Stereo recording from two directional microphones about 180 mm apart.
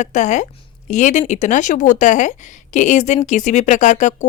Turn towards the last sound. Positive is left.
turn(degrees=45)  # may be behind; listen again after turning